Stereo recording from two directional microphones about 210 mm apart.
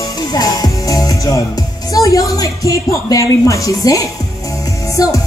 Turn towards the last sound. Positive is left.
turn(degrees=15)  # may be behind; listen again after turning